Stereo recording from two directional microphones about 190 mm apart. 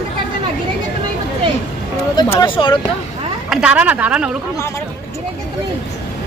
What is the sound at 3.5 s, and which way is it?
Speech, 5° right (ahead or behind).